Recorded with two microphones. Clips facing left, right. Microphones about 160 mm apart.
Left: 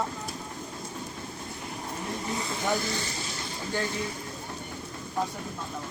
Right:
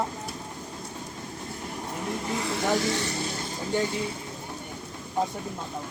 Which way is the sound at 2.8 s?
75° right (ahead or behind).